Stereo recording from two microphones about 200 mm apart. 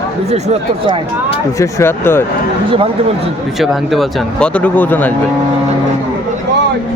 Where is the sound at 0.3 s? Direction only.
30° right (ahead or behind).